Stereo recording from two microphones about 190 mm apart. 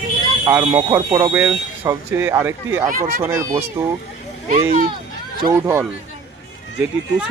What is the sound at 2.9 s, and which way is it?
Speech, 40° right (ahead or behind).